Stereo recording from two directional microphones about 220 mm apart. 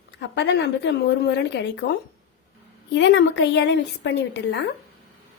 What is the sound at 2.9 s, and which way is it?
A woman's voice, 55° left (ahead or behind).